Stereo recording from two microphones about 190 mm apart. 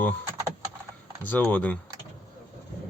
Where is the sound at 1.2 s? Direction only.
10° left (ahead or behind).